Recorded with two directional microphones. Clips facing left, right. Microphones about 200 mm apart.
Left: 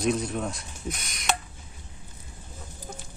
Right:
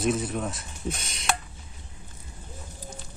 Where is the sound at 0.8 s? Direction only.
30° right (ahead or behind).